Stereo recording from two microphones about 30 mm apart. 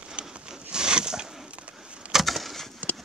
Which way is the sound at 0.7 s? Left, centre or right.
Right.